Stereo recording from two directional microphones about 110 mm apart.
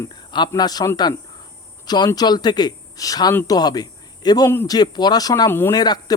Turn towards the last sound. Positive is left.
turn(degrees=35)  # may be behind; listen again after turning